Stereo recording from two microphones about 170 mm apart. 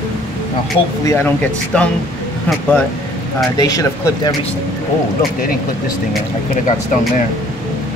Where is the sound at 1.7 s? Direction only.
5° left (ahead or behind).